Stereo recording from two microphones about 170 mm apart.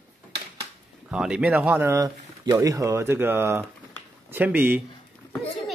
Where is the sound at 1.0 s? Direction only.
5° right (ahead or behind).